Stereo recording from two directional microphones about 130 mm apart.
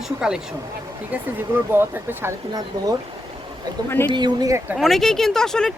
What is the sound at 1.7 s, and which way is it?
Speech, 15° right (ahead or behind).